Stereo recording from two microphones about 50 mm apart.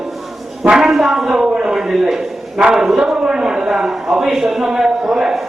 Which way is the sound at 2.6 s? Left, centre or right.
Centre.